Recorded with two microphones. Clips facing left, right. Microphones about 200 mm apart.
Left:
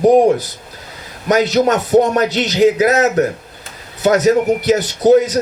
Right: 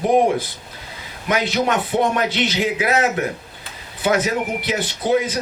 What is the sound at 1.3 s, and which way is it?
A man's voice, 40° left (ahead or behind).